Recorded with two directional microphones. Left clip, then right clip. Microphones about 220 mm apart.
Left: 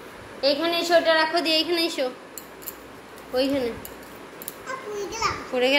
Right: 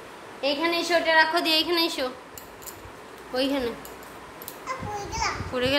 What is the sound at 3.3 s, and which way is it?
A child's voice, 20° right (ahead or behind).